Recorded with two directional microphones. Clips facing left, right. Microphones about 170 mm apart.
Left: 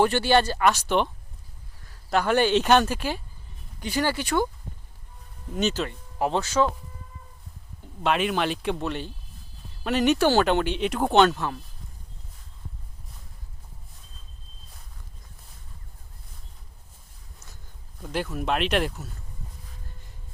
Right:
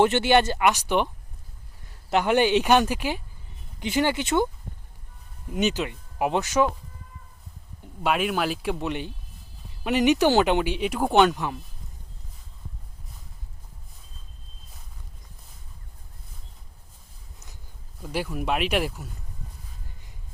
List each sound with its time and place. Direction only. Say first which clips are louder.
0.0 s speech: right 1 dB; 20° right (ahead or behind)
5.5 s speech: right 1 dB; 15° right (ahead or behind)
8.0 s speech: even; 5° right (ahead or behind)
8.8 s speech: right 1 dB; 15° right (ahead or behind)
18.0 s speech: even; 10° right (ahead or behind)